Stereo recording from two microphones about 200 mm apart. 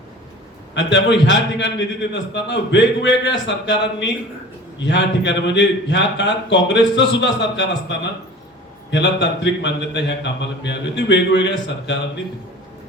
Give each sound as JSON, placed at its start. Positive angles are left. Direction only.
{"t": 0.7, "sound": "a man's voice", "side_deg": 60}